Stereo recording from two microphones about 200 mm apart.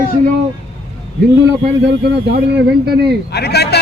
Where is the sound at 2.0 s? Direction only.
55° right (ahead or behind).